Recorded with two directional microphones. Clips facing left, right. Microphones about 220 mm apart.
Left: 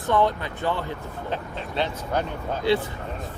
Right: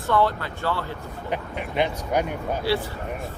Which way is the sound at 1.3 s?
15° right (ahead or behind).